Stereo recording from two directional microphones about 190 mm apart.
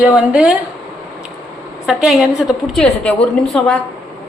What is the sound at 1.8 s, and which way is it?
A woman's voice, centre (ahead or behind).